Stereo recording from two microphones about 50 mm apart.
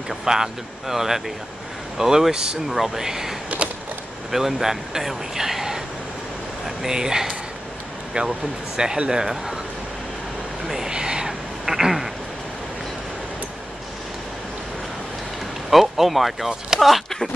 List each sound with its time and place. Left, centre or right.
0.1 s speech: centre
6.8 s speech: centre
8.2 s speech: right
10.7 s a sound: centre
15.7 s speech: centre